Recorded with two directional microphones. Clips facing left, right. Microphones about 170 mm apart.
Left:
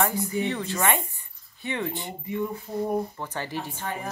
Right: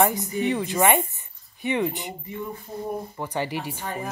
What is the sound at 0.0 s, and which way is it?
Speech, 15° right (ahead or behind).